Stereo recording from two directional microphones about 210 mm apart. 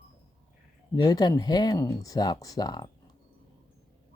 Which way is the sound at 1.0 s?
15° left (ahead or behind).